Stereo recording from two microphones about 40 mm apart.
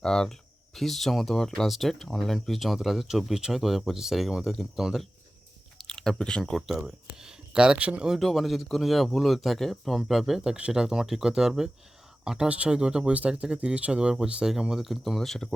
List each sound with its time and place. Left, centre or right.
0.0 s speech: centre
4.4 s speech: centre
5.7 s chewing: centre
6.6 s a sound: centre
7.8 s speech: right
8.2 s speech: centre
10.7 s speech: centre
11.0 s speech: centre
12.5 s speech: right
13.1 s speech: right
14.7 s speech: centre